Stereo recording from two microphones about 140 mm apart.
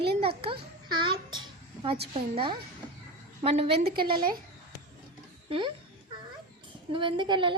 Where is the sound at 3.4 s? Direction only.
45° right (ahead or behind).